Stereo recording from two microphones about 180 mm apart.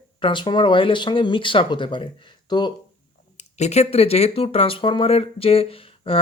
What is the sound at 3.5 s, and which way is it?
Speech, 35° left (ahead or behind).